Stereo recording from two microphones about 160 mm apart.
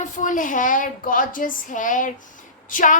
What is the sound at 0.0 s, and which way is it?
A woman's voice, 55° left (ahead or behind).